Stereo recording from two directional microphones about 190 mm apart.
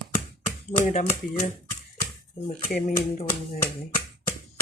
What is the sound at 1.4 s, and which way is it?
Typewriter, 15° left (ahead or behind).